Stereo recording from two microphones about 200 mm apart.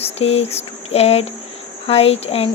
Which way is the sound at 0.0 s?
30° left (ahead or behind).